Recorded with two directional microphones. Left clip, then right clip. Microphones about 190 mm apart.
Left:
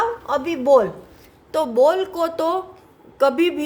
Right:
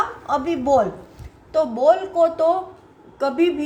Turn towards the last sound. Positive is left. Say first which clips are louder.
# left 2 dB
turn(degrees=40)  # may be behind; listen again after turning